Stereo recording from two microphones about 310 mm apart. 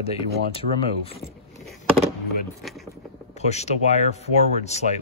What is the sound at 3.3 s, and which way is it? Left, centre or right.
Speech, left.